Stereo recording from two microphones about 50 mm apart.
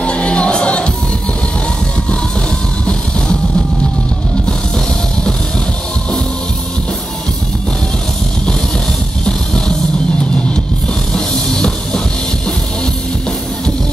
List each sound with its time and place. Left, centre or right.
0.0 s music: left
4.5 s music: centre
9.2 s music: centre
11.1 s music: centre